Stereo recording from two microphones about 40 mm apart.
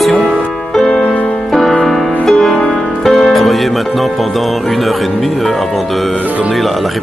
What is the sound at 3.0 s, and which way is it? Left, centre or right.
Speech, centre.